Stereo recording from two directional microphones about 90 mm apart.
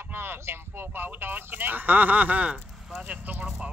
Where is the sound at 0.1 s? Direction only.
25° right (ahead or behind).